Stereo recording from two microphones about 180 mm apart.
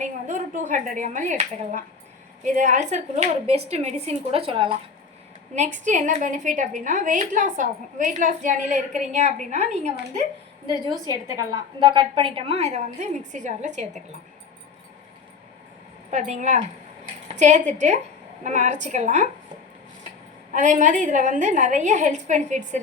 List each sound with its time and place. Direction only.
0.0 s a woman's voice: 45° right (ahead or behind)
5.5 s a woman's voice: 40° right (ahead or behind)
11.1 s a woman's voice: 25° right (ahead or behind); by 14.0 s 40° right (ahead or behind)
16.0 s a woman's voice: 40° right (ahead or behind)
20.5 s a woman's voice: 45° right (ahead or behind)